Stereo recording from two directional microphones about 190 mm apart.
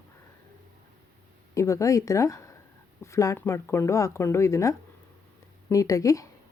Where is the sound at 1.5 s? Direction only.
15° left (ahead or behind).